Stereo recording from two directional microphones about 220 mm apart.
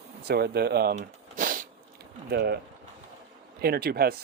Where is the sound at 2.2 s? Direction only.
45° right (ahead or behind).